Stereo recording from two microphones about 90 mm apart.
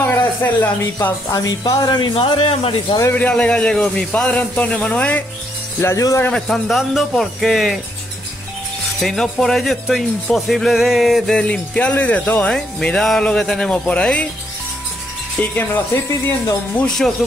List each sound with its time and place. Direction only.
0.0 s speech: 25° left (ahead or behind)
1.3 s speech: 45° left (ahead or behind)
2.1 s speech: 85° left
3.2 s a man's voice: 15° left (ahead or behind)
5.8 s speech: 30° left (ahead or behind)
6.3 s speech: 5° left (ahead or behind)
9.0 s speech: 5° left (ahead or behind)
15.5 s speech: 25° left (ahead or behind)
16.7 s a man's voice: 5° left (ahead or behind)